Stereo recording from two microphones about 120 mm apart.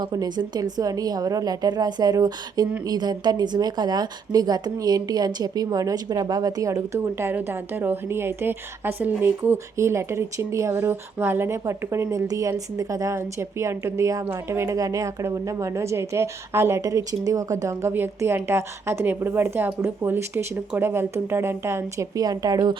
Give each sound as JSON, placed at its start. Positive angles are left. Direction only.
{"t": 0.0, "sound": "a woman's voice", "side_deg": -35}